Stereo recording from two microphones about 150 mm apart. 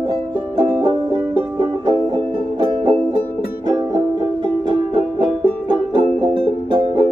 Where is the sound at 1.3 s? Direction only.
25° right (ahead or behind).